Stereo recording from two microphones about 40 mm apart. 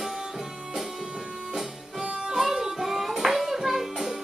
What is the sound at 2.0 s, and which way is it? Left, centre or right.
Music, centre.